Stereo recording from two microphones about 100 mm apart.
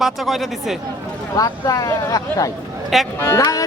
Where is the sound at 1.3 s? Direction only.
40° left (ahead or behind).